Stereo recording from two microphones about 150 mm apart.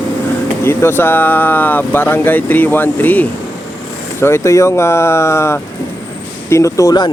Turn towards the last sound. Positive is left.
turn(degrees=25)  # may be behind; listen again after turning